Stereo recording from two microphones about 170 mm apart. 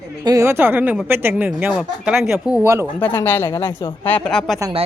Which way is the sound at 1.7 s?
Centre (ahead or behind).